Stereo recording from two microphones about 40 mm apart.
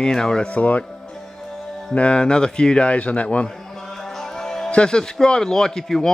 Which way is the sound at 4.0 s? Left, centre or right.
Centre.